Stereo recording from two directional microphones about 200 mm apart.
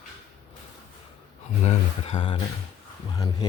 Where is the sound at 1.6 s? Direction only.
30° left (ahead or behind).